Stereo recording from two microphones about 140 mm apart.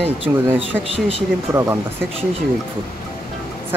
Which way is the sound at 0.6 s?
40° right (ahead or behind).